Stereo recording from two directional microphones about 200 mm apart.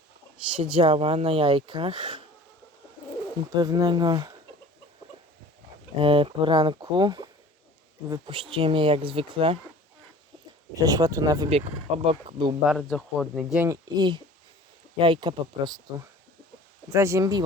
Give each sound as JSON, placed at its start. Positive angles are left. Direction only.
{"t": 0.8, "sound": "speech", "side_deg": -25}
{"t": 3.5, "sound": "speech", "side_deg": -20}
{"t": 6.0, "sound": "speech", "side_deg": -25}
{"t": 10.8, "sound": "speech", "side_deg": -15}
{"t": 12.6, "sound": "speech", "side_deg": 0}